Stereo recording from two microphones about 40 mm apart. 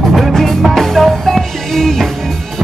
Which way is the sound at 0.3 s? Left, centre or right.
Centre.